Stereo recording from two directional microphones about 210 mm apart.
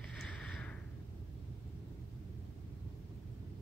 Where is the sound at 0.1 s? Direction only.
5° left (ahead or behind).